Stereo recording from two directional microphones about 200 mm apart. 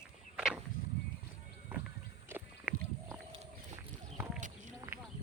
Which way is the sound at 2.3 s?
10° right (ahead or behind).